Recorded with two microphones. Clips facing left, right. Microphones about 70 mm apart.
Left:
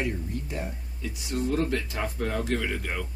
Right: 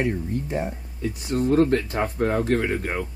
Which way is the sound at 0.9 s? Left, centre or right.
Right.